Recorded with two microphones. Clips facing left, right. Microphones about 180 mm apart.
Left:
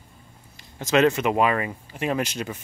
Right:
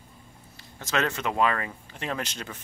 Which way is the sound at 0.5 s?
15° left (ahead or behind).